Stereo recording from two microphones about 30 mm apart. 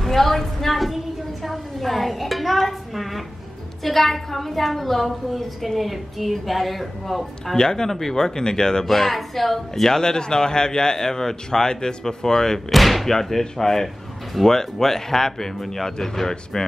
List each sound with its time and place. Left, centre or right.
0.0 s a sound: centre
3.8 s a woman's voice: centre
7.5 s speech: left
8.8 s speech: centre
12.7 s a woman's voice: centre